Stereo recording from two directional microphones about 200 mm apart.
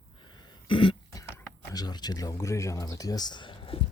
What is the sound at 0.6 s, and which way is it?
Cough, 25° left (ahead or behind).